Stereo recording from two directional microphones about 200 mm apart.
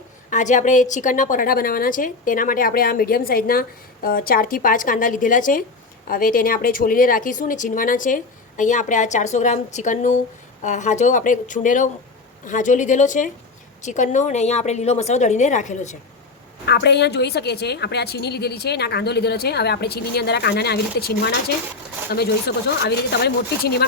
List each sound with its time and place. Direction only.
0.3 s a woman's voice: 40° left (ahead or behind)
16.6 s a woman's voice: 55° left (ahead or behind)